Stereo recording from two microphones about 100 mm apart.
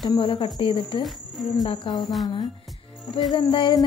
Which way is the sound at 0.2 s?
60° left (ahead or behind).